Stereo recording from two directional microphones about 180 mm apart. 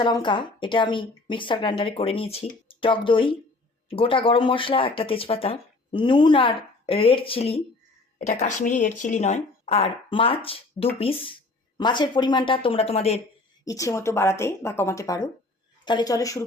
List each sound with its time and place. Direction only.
0.0 s speech: 25° left (ahead or behind)
8.3 s speech: 45° left (ahead or behind)
13.7 s speech: 15° left (ahead or behind)